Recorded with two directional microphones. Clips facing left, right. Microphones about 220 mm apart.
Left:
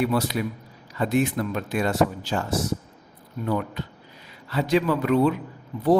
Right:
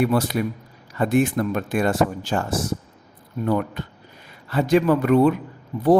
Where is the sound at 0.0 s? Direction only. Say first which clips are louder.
Right 3 dB; 50° right (ahead or behind).